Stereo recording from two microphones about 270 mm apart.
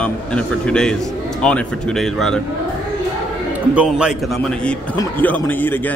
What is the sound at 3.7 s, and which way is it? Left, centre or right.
Speech, centre.